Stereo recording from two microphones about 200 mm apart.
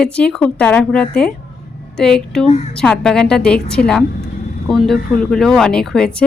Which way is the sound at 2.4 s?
35° left (ahead or behind).